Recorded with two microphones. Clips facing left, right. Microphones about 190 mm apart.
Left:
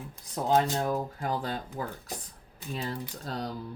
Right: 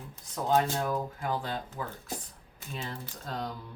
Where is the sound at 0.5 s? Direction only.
40° left (ahead or behind).